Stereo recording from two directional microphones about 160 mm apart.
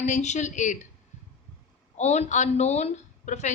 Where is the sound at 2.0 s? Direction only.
45° left (ahead or behind).